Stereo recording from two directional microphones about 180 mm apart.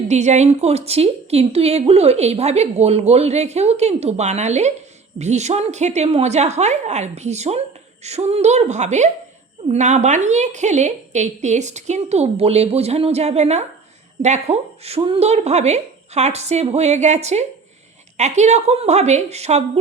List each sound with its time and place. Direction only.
0.1 s a woman's voice: 40° right (ahead or behind)